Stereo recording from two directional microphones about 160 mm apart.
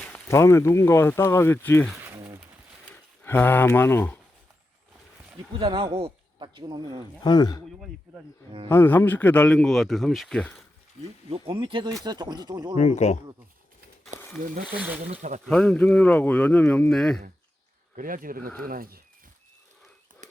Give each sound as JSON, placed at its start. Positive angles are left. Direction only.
{"t": 0.0, "sound": "speech", "side_deg": 15}
{"t": 2.0, "sound": "a sound", "side_deg": -10}
{"t": 2.9, "sound": "speech", "side_deg": 10}
{"t": 5.5, "sound": "speech", "side_deg": -35}
{"t": 7.3, "sound": "speech", "side_deg": 25}
{"t": 8.7, "sound": "speech", "side_deg": 10}
{"t": 11.3, "sound": "speech", "side_deg": -35}
{"t": 12.8, "sound": "speech", "side_deg": 45}
{"t": 14.1, "sound": "a sound", "side_deg": -50}
{"t": 14.4, "sound": "speech", "side_deg": -60}
{"t": 14.8, "sound": "speech", "side_deg": -10}
{"t": 15.1, "sound": "speech", "side_deg": -50}
{"t": 15.4, "sound": "speech", "side_deg": 5}
{"t": 17.9, "sound": "speech", "side_deg": -60}